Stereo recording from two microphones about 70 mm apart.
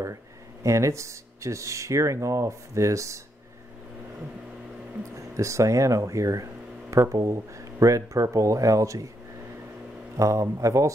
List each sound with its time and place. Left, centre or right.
0.7 s speech: right
5.1 s speech: right
10.1 s speech: right